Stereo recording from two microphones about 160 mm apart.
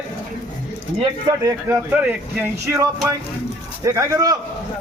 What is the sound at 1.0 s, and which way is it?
A man's voice, 25° right (ahead or behind).